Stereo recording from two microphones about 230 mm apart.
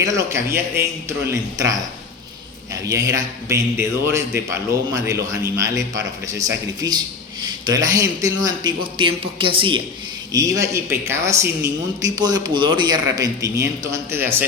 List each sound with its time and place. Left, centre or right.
0.0 s a man's voice: centre
2.7 s a man's voice: centre